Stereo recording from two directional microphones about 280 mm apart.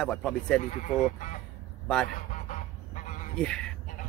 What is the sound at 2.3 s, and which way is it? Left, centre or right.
Goose, left.